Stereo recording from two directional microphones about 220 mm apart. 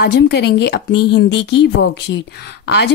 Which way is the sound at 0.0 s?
50° left (ahead or behind).